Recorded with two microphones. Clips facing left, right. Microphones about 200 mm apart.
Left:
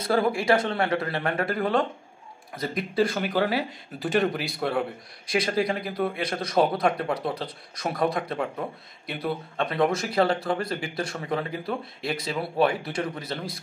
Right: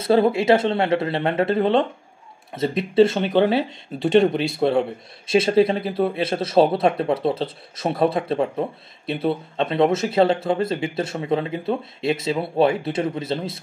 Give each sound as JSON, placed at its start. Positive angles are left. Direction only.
{"t": 0.0, "sound": "speech", "side_deg": -25}